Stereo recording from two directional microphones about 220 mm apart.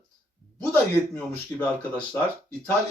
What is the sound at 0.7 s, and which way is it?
Speech, 5° left (ahead or behind).